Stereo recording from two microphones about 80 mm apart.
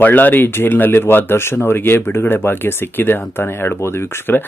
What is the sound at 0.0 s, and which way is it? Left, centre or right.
Speech, left.